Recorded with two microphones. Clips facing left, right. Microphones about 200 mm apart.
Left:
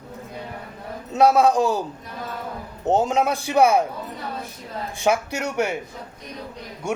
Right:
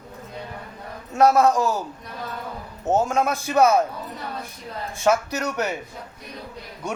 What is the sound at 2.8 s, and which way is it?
A man's voice, 15° left (ahead or behind).